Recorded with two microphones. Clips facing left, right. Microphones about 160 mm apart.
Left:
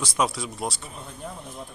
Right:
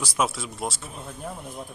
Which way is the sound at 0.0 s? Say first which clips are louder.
Left 1 dB; centre (ahead or behind).